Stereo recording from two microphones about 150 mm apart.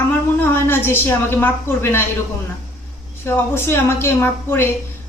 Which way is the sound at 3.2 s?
15° left (ahead or behind).